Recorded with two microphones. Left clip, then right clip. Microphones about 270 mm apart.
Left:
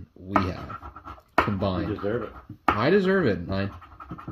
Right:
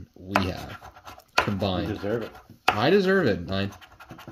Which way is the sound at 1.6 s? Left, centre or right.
Centre.